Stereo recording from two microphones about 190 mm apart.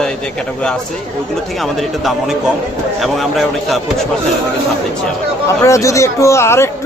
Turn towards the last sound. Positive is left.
turn(degrees=15)  # may be behind; listen again after turning